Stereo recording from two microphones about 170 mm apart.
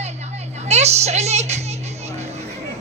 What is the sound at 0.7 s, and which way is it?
Music, 40° right (ahead or behind).